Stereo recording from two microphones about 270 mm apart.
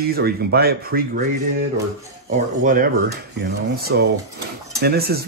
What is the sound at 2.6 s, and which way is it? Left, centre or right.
Speech, right.